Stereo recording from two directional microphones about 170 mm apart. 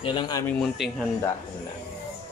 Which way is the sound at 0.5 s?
5° left (ahead or behind).